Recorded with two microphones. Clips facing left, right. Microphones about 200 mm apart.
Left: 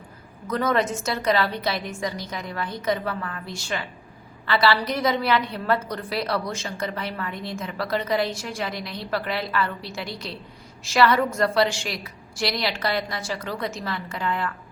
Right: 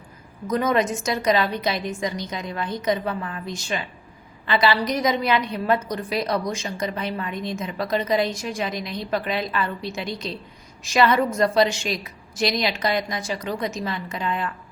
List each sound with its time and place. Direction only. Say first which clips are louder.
0.4 s a woman's voice: right 2 dB; 15° right (ahead or behind)